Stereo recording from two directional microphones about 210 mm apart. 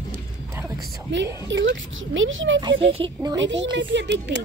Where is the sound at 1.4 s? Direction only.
60° right (ahead or behind).